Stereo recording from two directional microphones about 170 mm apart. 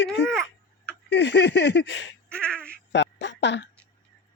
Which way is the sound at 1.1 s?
90° left.